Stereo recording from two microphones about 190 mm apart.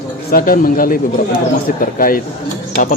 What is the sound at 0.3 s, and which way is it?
A man's voice, 50° left (ahead or behind).